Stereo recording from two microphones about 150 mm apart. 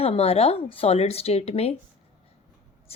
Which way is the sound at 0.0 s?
40° left (ahead or behind).